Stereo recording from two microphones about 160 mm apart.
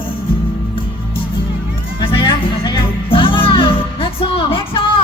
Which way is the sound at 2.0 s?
35° left (ahead or behind).